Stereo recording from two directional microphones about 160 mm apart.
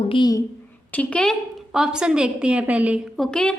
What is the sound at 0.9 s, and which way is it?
Speech, 5° left (ahead or behind).